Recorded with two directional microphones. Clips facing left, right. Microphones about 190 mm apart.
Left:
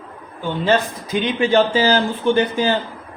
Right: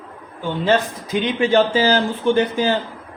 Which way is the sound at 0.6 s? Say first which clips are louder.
Even; 60° right (ahead or behind).